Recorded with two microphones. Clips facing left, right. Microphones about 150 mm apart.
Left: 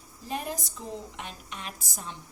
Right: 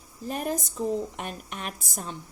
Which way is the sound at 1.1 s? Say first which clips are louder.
Right 5 dB; 55° right (ahead or behind).